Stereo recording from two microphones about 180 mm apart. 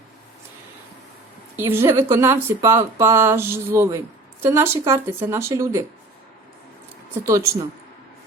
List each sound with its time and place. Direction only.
1.5 s speech: 15° right (ahead or behind)
7.1 s speech: 15° right (ahead or behind)